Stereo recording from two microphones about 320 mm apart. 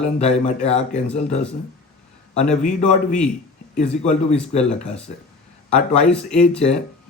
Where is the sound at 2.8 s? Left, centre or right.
Centre.